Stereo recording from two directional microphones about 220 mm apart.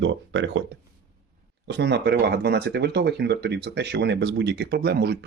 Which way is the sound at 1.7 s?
50° right (ahead or behind).